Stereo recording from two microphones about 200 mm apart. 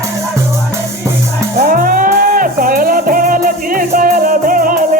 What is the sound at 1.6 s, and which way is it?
Music, 45° right (ahead or behind).